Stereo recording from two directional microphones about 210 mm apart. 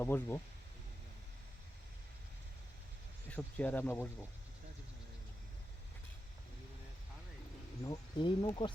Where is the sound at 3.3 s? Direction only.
10° left (ahead or behind).